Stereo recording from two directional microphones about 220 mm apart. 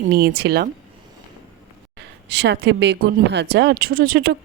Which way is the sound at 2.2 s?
50° right (ahead or behind).